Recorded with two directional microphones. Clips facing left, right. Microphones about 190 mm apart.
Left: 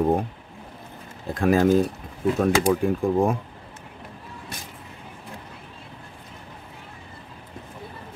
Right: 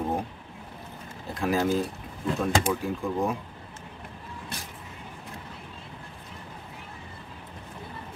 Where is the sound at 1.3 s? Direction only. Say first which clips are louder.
Left 7 dB; 55° left (ahead or behind).